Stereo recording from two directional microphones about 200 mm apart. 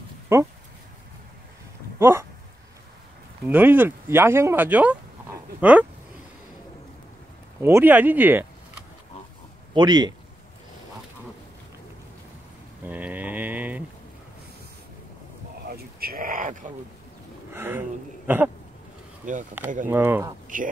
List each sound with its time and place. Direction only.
0.3 s speech: 10° right (ahead or behind)
2.0 s speech: 10° right (ahead or behind)
3.4 s speech: 10° right (ahead or behind)
7.6 s speech: 10° right (ahead or behind)
9.8 s speech: 20° right (ahead or behind)
12.8 s a sound: 10° right (ahead or behind)
15.7 s a sound: 50° right (ahead or behind)
17.5 s a sound: 10° right (ahead or behind)
19.9 s speech: 10° right (ahead or behind)
20.4 s a man's voice: 40° right (ahead or behind)